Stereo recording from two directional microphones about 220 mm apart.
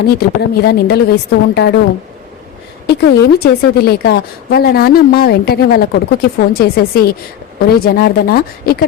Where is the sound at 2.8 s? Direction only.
50° left (ahead or behind).